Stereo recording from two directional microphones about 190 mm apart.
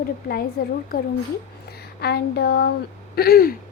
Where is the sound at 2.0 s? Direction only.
55° left (ahead or behind).